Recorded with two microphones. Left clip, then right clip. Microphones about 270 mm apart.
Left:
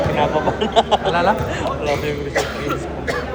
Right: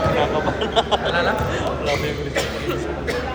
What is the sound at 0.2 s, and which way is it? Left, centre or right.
Speech, left.